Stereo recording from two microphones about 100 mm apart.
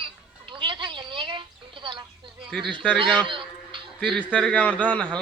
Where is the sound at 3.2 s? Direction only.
55° right (ahead or behind).